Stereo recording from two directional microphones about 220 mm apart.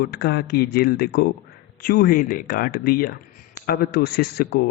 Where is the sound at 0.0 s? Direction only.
45° left (ahead or behind).